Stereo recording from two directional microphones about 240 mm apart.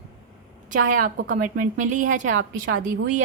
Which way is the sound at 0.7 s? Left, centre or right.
Right.